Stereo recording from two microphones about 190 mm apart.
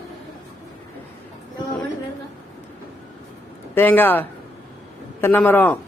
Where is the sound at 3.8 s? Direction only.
10° left (ahead or behind).